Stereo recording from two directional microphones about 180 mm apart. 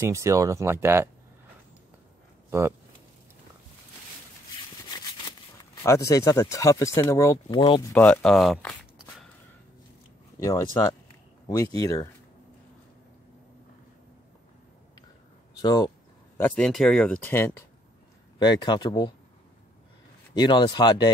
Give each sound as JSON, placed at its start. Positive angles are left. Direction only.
{"t": 0.0, "sound": "speech", "side_deg": -15}
{"t": 5.9, "sound": "speech", "side_deg": 20}
{"t": 7.4, "sound": "speech", "side_deg": 30}
{"t": 7.9, "sound": "speech", "side_deg": 5}
{"t": 10.4, "sound": "speech", "side_deg": 20}
{"t": 15.5, "sound": "speech", "side_deg": 20}
{"t": 16.3, "sound": "speech", "side_deg": 10}
{"t": 18.4, "sound": "speech", "side_deg": 25}
{"t": 20.3, "sound": "speech", "side_deg": 25}